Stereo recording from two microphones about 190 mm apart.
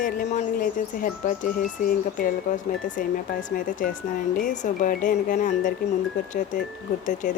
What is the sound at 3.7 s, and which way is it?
Speech, 45° left (ahead or behind).